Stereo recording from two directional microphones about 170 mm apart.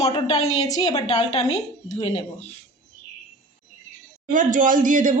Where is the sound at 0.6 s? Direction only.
20° left (ahead or behind).